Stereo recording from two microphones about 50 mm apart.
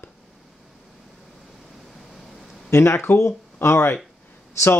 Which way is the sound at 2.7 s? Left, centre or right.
Left.